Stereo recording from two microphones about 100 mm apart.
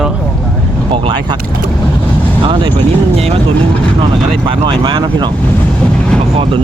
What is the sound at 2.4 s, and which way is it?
Speech, 60° right (ahead or behind).